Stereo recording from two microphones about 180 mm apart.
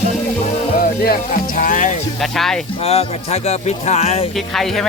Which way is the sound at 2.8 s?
35° left (ahead or behind).